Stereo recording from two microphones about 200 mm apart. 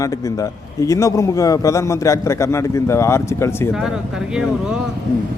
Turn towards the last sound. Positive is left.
turn(degrees=15)  # may be behind; listen again after turning